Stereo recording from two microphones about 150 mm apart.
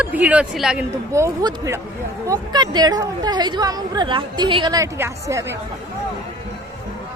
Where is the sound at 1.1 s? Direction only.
20° right (ahead or behind).